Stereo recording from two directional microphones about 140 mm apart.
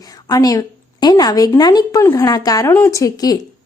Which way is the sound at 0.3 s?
25° left (ahead or behind).